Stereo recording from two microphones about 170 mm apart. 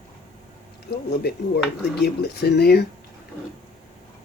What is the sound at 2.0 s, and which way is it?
Speech, 70° left (ahead or behind).